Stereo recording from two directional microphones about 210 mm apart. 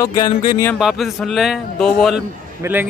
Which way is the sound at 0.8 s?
Centre (ahead or behind).